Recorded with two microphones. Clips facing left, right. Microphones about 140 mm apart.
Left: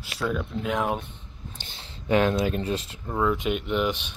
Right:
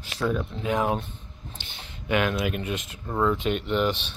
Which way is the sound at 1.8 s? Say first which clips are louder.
Left 3 dB; 30° left (ahead or behind).